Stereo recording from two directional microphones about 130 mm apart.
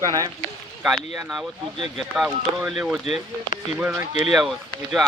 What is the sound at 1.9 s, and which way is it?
Speech, 5° right (ahead or behind).